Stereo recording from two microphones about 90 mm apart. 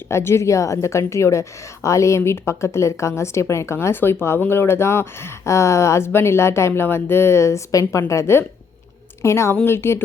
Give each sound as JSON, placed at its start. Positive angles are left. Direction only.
{"t": 0.1, "sound": "a woman's voice", "side_deg": 30}